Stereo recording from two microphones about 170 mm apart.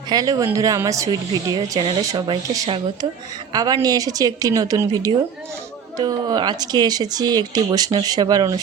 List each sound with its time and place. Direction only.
0.1 s speech: 20° right (ahead or behind)